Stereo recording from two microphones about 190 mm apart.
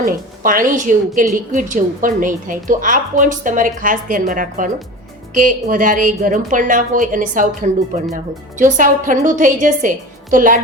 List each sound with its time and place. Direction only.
0.0 s a woman's voice: 45° right (ahead or behind)